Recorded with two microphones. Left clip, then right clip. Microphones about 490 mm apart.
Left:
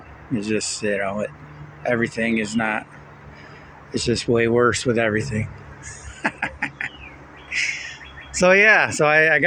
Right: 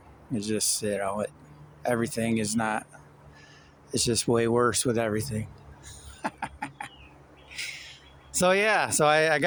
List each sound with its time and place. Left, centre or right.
0.3 s speech: right
3.9 s speech: right
8.3 s speech: right